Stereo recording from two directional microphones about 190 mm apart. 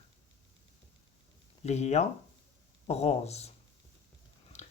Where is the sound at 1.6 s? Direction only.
35° left (ahead or behind).